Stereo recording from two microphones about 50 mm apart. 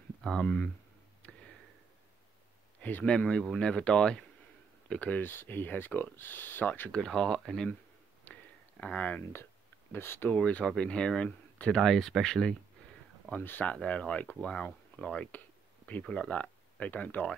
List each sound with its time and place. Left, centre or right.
0.2 s speech: centre
1.2 s a sound: left
2.8 s speech: left
3.1 s speech: centre
5.0 s speech: left
7.1 s speech: centre
8.3 s a sound: left
8.9 s speech: left
9.9 s speech: left
10.3 s speech: left
11.2 s a sound: left
11.8 s speech: centre
13.4 s speech: left
13.8 s speech: left